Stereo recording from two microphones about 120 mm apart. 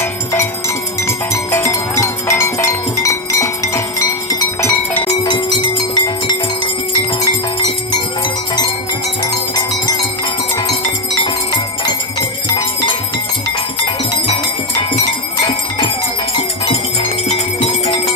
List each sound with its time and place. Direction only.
0.0 s music: 20° left (ahead or behind)
5.2 s music: 40° left (ahead or behind)
9.2 s music: 35° left (ahead or behind)
11.5 s music: 40° left (ahead or behind)
16.3 s music: 50° left (ahead or behind)